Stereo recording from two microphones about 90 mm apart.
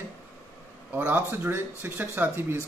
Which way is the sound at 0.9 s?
20° right (ahead or behind).